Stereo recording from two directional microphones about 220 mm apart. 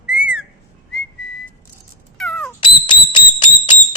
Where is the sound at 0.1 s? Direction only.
5° right (ahead or behind).